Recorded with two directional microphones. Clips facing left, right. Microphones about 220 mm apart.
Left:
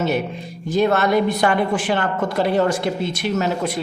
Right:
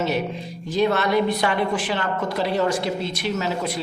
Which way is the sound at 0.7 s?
50° left (ahead or behind).